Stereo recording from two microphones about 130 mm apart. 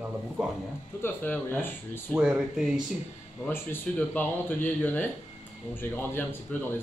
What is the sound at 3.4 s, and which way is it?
Speech, 15° left (ahead or behind).